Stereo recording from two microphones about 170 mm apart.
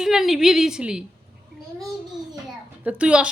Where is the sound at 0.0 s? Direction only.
Centre (ahead or behind).